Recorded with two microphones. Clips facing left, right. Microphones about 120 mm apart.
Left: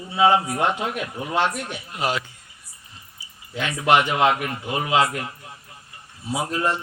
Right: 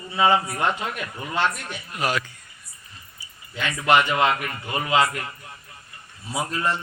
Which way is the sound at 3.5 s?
5° left (ahead or behind).